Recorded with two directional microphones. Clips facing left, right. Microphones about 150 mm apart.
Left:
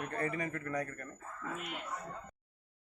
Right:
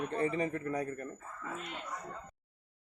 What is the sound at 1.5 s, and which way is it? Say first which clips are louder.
Speech: even; 5° left (ahead or behind).